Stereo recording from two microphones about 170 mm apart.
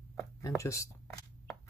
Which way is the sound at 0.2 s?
15° left (ahead or behind).